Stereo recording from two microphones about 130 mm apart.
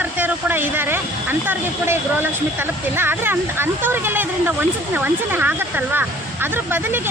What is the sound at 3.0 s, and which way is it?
Speech, 15° right (ahead or behind).